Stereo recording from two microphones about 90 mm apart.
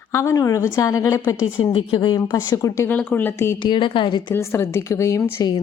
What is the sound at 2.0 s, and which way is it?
Speech, 45° left (ahead or behind).